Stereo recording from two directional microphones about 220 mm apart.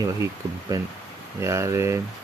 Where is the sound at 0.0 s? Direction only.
15° right (ahead or behind).